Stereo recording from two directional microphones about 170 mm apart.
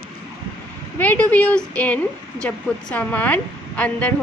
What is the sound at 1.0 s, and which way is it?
Speech, 10° left (ahead or behind).